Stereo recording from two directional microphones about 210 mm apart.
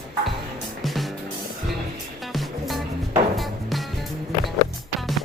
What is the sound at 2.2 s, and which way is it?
Music, centre (ahead or behind).